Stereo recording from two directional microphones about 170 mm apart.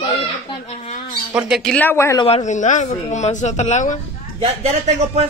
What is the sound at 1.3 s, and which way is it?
Speech, centre (ahead or behind).